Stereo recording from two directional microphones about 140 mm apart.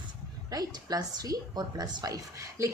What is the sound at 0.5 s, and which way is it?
A woman's voice, 25° right (ahead or behind).